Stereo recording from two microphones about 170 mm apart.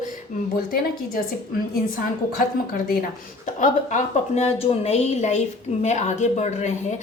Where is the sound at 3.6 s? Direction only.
50° left (ahead or behind).